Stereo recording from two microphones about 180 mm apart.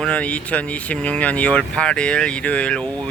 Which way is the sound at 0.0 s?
5° left (ahead or behind).